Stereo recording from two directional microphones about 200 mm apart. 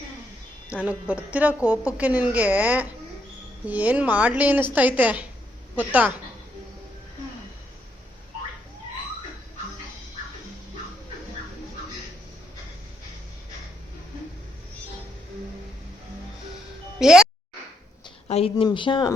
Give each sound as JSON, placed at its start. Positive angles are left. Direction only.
{"t": 0.7, "sound": "a woman's voice", "side_deg": -5}
{"t": 17.0, "sound": "speech", "side_deg": -5}
{"t": 18.3, "sound": "a sound", "side_deg": 30}
{"t": 18.5, "sound": "speech", "side_deg": 25}